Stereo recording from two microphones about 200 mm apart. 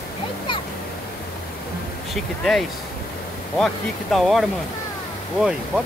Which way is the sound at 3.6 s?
Centre (ahead or behind).